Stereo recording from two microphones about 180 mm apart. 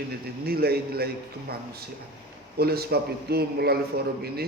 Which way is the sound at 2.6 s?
60° right (ahead or behind).